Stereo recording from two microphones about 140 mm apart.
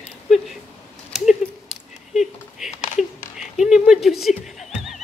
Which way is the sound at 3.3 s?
5° right (ahead or behind).